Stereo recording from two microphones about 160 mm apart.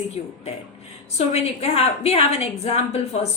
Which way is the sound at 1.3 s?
40° left (ahead or behind).